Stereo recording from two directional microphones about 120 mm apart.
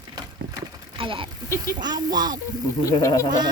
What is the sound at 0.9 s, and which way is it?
A child's voice, 45° right (ahead or behind).